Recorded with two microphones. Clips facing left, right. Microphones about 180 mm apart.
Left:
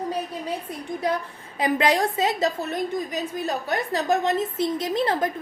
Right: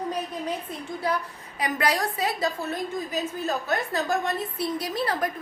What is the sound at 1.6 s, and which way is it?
A woman's voice, 25° left (ahead or behind).